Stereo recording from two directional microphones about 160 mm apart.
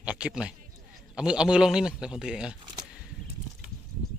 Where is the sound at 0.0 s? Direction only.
5° right (ahead or behind).